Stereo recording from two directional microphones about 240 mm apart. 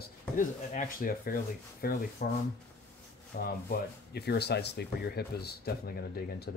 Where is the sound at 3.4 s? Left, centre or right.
Left.